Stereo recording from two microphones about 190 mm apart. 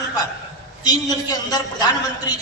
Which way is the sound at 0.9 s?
20° left (ahead or behind).